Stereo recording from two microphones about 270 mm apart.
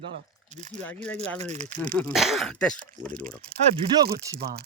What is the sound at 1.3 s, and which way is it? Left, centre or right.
Speech, right.